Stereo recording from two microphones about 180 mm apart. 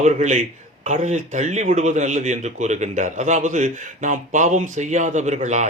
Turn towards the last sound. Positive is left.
turn(degrees=-40)  # may be behind; listen again after turning